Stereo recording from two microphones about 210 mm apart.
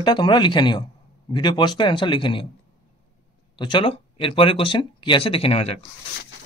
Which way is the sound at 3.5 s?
20° left (ahead or behind).